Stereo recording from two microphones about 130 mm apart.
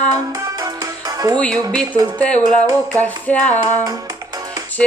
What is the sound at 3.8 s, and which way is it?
Music, 30° right (ahead or behind).